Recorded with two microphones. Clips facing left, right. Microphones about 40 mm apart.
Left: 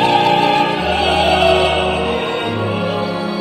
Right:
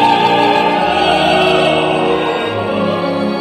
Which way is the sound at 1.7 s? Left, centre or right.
Centre.